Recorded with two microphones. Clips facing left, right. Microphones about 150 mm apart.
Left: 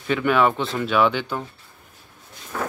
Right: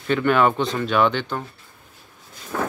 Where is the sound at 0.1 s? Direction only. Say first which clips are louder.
Right 1 dB; 5° left (ahead or behind).